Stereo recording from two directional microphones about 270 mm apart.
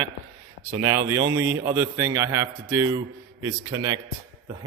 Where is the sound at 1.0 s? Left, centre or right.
Centre.